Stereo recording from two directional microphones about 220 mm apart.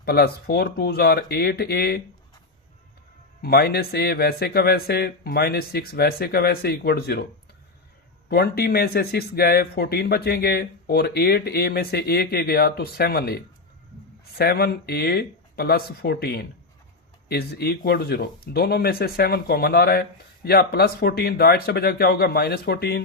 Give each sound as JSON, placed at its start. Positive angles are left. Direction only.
{"t": 0.0, "sound": "speech", "side_deg": 45}
{"t": 3.4, "sound": "speech", "side_deg": 45}
{"t": 8.3, "sound": "speech", "side_deg": 45}